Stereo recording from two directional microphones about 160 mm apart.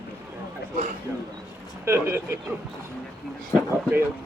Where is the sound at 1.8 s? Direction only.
15° right (ahead or behind).